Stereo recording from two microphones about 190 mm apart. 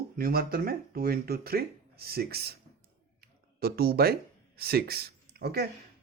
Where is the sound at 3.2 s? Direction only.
55° right (ahead or behind).